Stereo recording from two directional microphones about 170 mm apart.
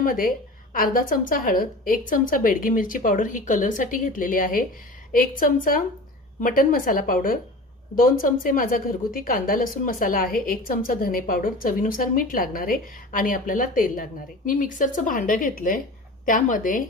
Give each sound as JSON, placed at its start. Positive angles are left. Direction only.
{"t": 0.0, "sound": "a woman's voice", "side_deg": 55}